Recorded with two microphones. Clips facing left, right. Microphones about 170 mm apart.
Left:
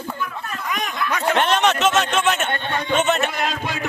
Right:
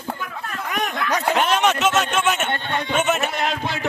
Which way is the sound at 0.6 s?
60° right (ahead or behind).